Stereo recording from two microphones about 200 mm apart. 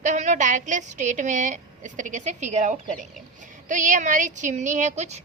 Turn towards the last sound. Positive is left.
turn(degrees=-35)  # may be behind; listen again after turning